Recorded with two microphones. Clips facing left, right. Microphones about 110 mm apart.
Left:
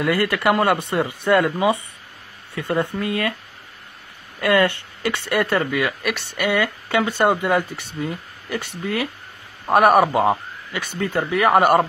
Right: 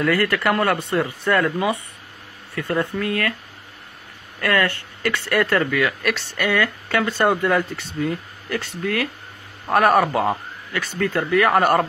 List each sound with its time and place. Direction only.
0.0 s speech: 10° left (ahead or behind)
4.4 s a man's voice: 15° left (ahead or behind)